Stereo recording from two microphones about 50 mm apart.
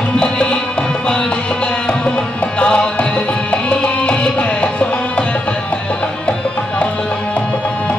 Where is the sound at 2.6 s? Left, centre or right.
Centre.